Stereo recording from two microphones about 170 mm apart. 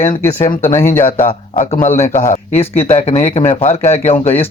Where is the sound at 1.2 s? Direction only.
50° left (ahead or behind).